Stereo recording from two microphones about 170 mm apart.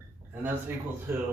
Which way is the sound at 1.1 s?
15° right (ahead or behind).